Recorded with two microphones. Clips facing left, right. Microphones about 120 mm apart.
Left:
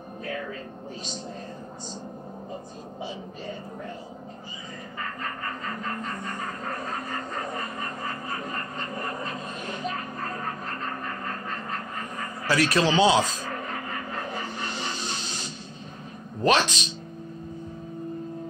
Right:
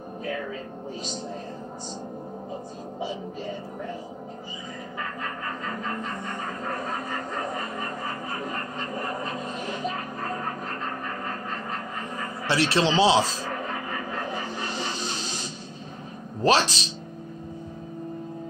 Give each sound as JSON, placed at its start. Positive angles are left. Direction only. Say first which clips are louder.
{"t": 12.4, "sound": "speech", "louder": "even", "side_deg": -30}
{"t": 16.4, "sound": "speech", "louder": "right 1 dB", "side_deg": -35}